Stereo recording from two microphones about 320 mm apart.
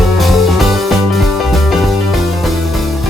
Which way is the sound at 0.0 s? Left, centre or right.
Centre.